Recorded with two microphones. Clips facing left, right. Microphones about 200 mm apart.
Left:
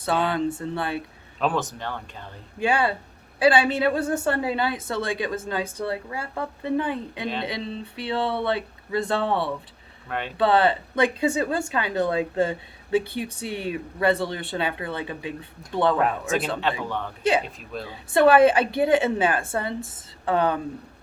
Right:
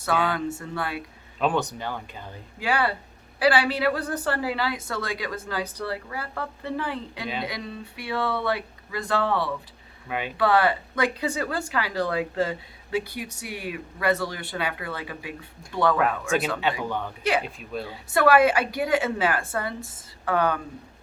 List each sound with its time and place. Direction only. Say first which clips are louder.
0.0 s speech: left 2 dB; 30° left (ahead or behind)
1.4 s speech: right 1 dB; centre (ahead or behind)
2.6 s speech: left 3 dB; 25° left (ahead or behind)
10.1 s speech: even; 5° right (ahead or behind)
10.3 s speech: left 2 dB; 25° left (ahead or behind)
17.4 s speech: right 2 dB; centre (ahead or behind)
18.1 s speech: left 3 dB; 25° left (ahead or behind)